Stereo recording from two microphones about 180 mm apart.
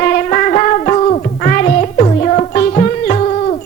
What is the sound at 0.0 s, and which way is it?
Music, 45° left (ahead or behind).